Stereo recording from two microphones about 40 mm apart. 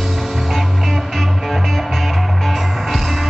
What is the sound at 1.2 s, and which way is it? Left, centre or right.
Music, centre.